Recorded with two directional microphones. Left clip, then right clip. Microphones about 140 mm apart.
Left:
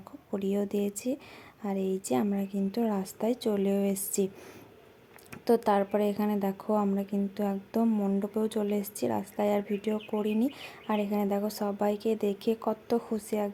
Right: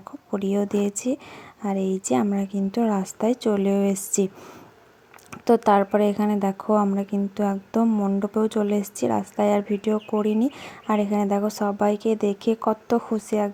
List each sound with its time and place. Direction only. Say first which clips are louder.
0.3 s a woman's voice: right 6 dB; 15° right (ahead or behind)
5.3 s speech: right 7 dB; 20° right (ahead or behind)